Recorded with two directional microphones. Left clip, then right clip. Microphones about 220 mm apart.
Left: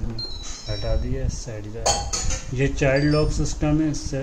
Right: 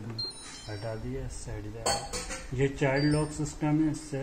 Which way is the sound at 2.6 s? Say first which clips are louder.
Left 7 dB; 20° left (ahead or behind).